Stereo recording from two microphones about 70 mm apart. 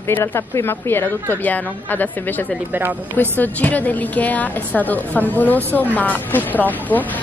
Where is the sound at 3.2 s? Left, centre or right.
Left.